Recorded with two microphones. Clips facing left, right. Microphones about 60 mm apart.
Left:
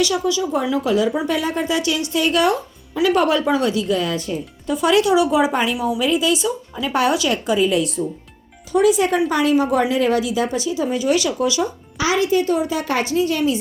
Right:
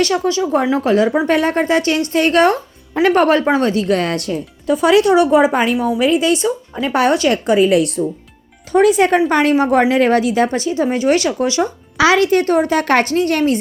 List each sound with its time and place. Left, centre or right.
0.0 s speech: right
1.3 s a woman's voice: right
11.9 s a woman's voice: right